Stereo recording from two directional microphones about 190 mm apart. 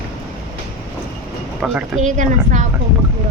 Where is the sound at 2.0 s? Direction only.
40° right (ahead or behind).